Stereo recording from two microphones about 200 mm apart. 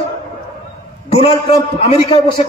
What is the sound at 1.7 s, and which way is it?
Speech, 30° left (ahead or behind).